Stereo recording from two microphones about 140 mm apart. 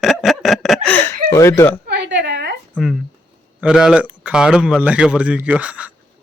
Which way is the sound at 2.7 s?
Centre (ahead or behind).